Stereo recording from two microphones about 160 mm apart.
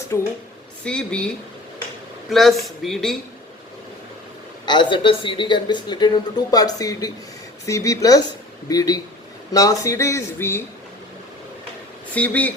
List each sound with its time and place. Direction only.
0.1 s speech: 15° left (ahead or behind)
0.9 s speech: 5° left (ahead or behind)
2.3 s speech: centre (ahead or behind)
4.6 s speech: 30° left (ahead or behind)
12.1 s speech: 10° left (ahead or behind)